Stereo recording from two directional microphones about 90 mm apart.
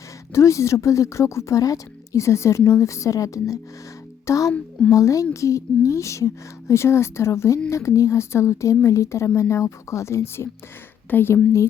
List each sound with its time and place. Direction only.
0.3 s a woman's voice: 35° left (ahead or behind)